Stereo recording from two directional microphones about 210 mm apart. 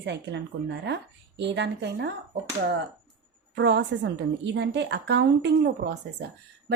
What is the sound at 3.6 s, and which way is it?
A woman's voice, 55° right (ahead or behind).